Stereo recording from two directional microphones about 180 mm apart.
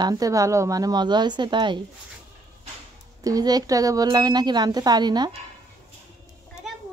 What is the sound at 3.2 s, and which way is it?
A woman's voice, 20° right (ahead or behind).